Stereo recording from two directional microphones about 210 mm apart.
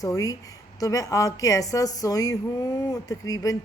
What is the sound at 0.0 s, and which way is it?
Speech, 15° left (ahead or behind).